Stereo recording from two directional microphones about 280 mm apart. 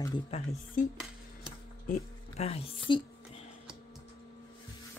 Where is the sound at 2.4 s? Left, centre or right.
Left.